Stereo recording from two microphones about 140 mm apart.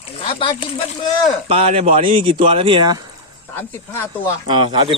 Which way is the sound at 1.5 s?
45° right (ahead or behind).